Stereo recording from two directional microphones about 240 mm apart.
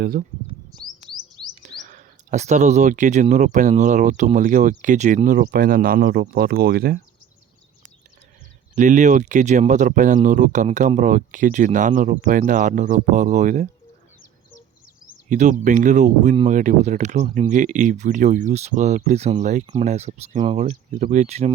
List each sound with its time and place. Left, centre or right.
0.0 s speech: right
0.7 s chirp: centre
1.6 s speech: right
8.7 s speech: right
15.3 s speech: right